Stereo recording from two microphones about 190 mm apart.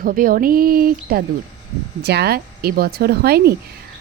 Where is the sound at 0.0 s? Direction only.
50° right (ahead or behind).